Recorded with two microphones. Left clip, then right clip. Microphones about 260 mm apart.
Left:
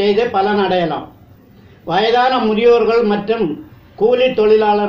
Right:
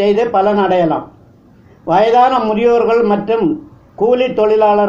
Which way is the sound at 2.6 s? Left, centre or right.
Right.